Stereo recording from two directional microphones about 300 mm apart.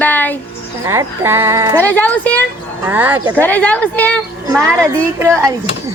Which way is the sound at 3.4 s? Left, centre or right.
Centre.